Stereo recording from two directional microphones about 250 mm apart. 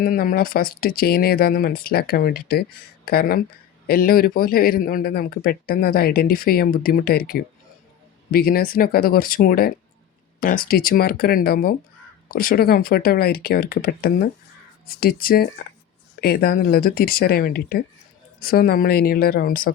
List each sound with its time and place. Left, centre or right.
0.0 s a man's voice: left